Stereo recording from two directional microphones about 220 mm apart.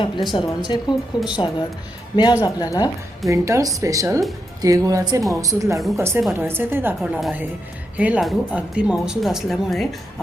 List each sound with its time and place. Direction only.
0.3 s a woman's voice: 20° left (ahead or behind)
3.2 s a woman's voice: 15° right (ahead or behind)